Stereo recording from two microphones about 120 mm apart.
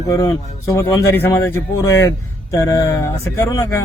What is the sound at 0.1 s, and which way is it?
Speech, 30° left (ahead or behind).